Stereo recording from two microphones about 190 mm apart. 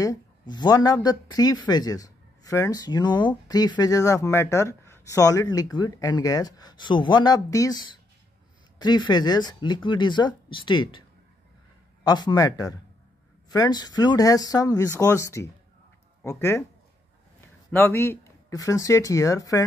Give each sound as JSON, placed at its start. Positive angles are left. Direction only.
{"t": 0.0, "sound": "speech", "side_deg": 20}
{"t": 17.6, "sound": "speech", "side_deg": 10}